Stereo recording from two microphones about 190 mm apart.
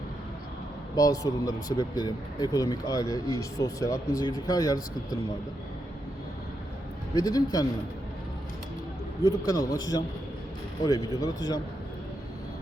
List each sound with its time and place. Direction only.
0.9 s speech: 20° left (ahead or behind)
7.2 s speech: 20° left (ahead or behind)
9.2 s speech: 20° left (ahead or behind)